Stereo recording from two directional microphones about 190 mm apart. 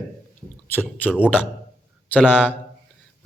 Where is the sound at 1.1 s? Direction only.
5° right (ahead or behind).